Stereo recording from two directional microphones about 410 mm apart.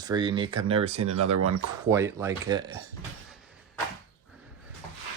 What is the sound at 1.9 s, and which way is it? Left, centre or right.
Speech, centre.